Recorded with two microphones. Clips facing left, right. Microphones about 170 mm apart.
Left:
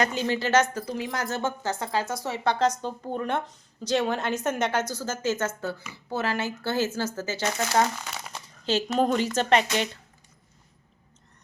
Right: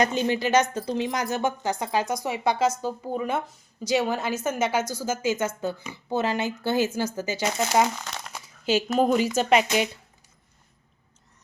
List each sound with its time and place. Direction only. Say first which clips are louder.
0.0 s a woman's voice: right 3 dB; 20° right (ahead or behind)
7.9 s speech: right 1 dB; 5° left (ahead or behind)
8.3 s speech: right 3 dB; 10° right (ahead or behind)